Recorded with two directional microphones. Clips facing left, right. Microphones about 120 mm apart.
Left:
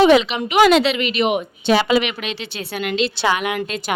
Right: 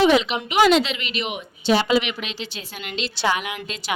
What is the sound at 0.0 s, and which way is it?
A woman's voice, 70° left (ahead or behind).